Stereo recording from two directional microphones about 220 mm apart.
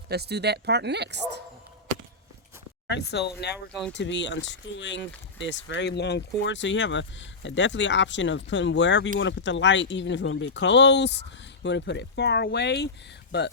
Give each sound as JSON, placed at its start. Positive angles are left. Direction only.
{"t": 0.1, "sound": "speech", "side_deg": -50}
{"t": 2.9, "sound": "speech", "side_deg": 50}